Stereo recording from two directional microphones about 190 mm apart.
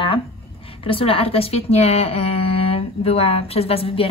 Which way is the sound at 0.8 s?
30° left (ahead or behind).